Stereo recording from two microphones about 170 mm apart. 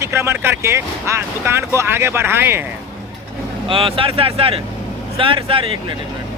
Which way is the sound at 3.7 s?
30° right (ahead or behind).